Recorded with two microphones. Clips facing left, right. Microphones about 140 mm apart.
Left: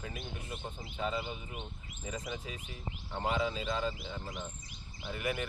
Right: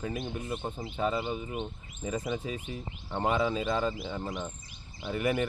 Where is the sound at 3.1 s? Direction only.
60° right (ahead or behind).